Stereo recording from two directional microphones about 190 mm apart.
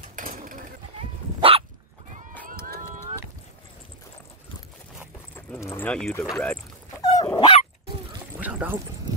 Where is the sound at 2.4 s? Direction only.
45° right (ahead or behind).